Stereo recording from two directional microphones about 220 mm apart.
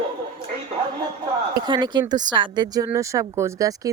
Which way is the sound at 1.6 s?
20° right (ahead or behind).